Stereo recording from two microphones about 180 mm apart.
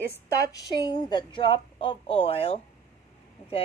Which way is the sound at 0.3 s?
20° left (ahead or behind).